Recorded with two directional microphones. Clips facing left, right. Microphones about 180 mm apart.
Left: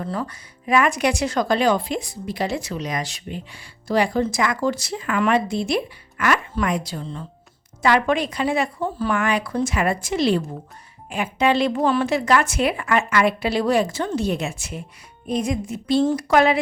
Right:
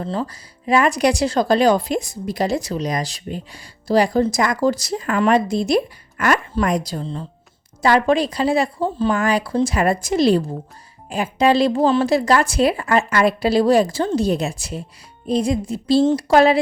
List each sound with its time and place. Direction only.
0.0 s speech: 30° right (ahead or behind)